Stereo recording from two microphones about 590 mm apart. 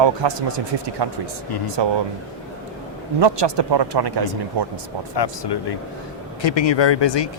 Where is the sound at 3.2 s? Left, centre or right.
Right.